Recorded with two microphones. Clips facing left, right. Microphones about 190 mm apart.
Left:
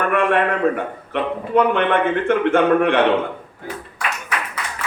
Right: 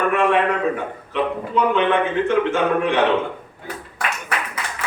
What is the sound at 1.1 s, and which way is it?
A man's voice, 60° left (ahead or behind).